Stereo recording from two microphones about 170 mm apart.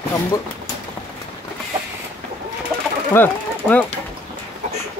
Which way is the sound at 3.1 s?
10° left (ahead or behind).